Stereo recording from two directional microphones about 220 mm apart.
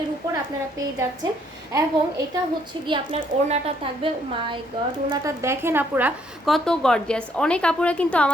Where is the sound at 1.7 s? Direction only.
15° right (ahead or behind).